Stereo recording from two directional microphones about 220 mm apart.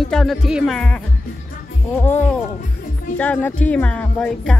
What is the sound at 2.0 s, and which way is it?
Speech, 10° left (ahead or behind).